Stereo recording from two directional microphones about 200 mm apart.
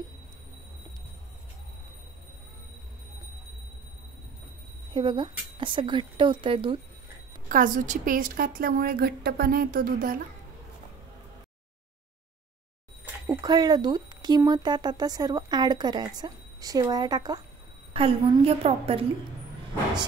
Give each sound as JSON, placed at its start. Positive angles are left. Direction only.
{"t": 4.9, "sound": "speech", "side_deg": -25}
{"t": 7.4, "sound": "a woman's voice", "side_deg": -40}
{"t": 13.0, "sound": "speech", "side_deg": -20}